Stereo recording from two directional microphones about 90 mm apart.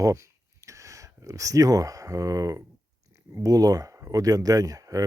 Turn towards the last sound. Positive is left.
turn(degrees=-40)  # may be behind; listen again after turning